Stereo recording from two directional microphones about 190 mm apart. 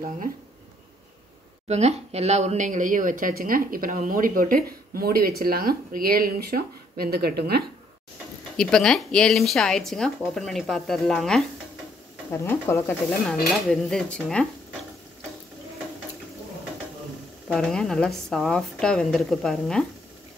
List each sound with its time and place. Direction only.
1.7 s a woman's voice: 35° right (ahead or behind); by 7.6 s 55° right (ahead or behind)
8.5 s speech: 5° left (ahead or behind)
12.3 s speech: 15° left (ahead or behind)
17.5 s speech: 5° left (ahead or behind)